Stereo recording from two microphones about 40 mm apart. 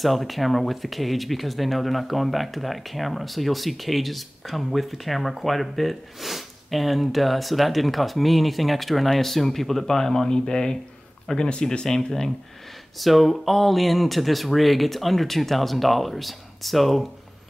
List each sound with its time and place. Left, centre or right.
0.0 s speech: centre
13.0 s speech: centre